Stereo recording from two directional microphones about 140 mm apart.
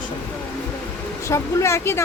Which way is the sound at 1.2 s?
20° left (ahead or behind).